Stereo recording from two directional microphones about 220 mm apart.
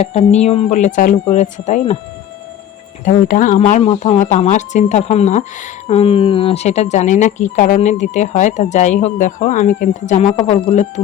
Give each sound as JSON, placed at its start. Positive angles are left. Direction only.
{"t": 0.0, "sound": "speech", "side_deg": 30}
{"t": 3.0, "sound": "speech", "side_deg": 35}